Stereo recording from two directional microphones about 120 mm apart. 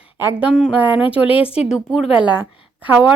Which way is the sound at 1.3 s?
50° left (ahead or behind).